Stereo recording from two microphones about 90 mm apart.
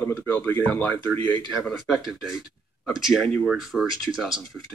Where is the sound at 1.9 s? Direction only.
Centre (ahead or behind).